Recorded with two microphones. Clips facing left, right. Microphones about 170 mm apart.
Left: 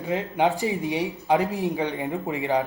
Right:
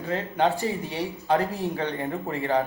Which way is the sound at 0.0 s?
15° left (ahead or behind).